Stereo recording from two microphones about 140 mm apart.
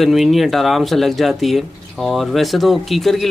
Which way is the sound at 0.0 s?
Centre (ahead or behind).